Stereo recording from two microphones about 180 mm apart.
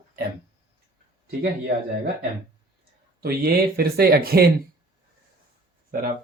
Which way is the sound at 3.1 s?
60° right (ahead or behind).